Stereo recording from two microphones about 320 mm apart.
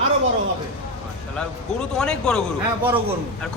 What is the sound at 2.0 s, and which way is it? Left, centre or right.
Speech, centre.